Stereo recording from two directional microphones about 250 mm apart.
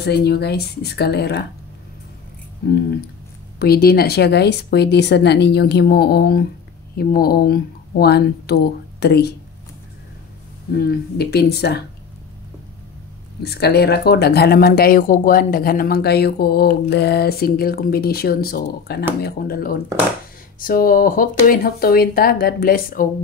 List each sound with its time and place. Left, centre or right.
0.0 s speech: left
3.5 s speech: left
10.7 s speech: left
13.4 s speech: left